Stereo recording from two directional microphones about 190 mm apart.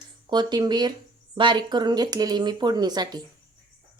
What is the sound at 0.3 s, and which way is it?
Speech, 25° right (ahead or behind).